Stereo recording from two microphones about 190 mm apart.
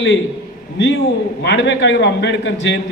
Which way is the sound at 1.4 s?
65° left (ahead or behind).